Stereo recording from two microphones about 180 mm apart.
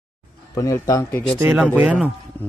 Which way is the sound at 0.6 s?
20° left (ahead or behind).